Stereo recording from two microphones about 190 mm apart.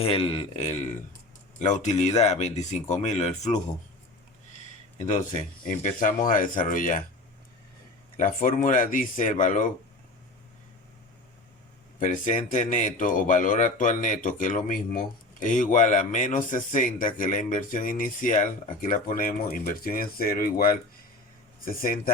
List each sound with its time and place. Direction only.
0.0 s speech: 30° left (ahead or behind)
4.9 s speech: 40° left (ahead or behind)
8.1 s speech: 45° left (ahead or behind)
11.9 s speech: 40° left (ahead or behind)